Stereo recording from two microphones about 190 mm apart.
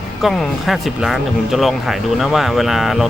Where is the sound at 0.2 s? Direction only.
Centre (ahead or behind).